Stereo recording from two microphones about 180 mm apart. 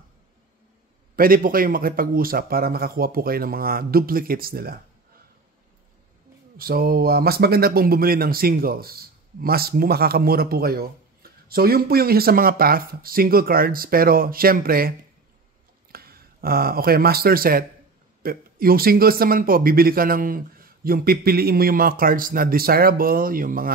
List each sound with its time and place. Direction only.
1.1 s speech: 50° right (ahead or behind)
6.5 s speech: 55° right (ahead or behind)